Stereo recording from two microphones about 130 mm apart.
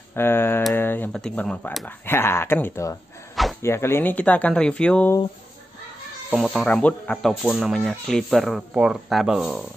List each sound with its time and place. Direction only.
0.1 s speech: 20° left (ahead or behind)
1.9 s speech: 20° left (ahead or behind)
6.3 s speech: centre (ahead or behind)
6.7 s speech: 10° left (ahead or behind)